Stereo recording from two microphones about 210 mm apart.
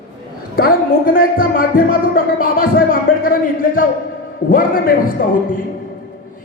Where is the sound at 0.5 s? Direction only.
45° left (ahead or behind).